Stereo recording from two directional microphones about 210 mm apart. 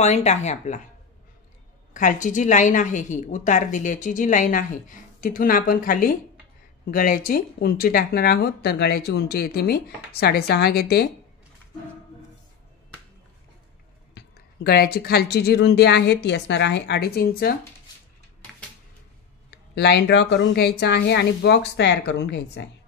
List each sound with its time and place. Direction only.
0.0 s a woman's voice: 30° left (ahead or behind)
2.0 s a woman's voice: 35° left (ahead or behind)
14.1 s speech: 50° left (ahead or behind)
19.7 s speech: 50° left (ahead or behind)